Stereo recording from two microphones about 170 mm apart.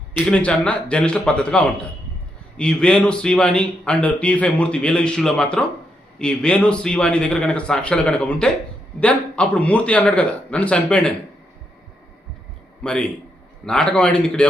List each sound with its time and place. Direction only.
0.1 s a man's voice: 5° left (ahead or behind)
12.8 s a man's voice: 5° left (ahead or behind)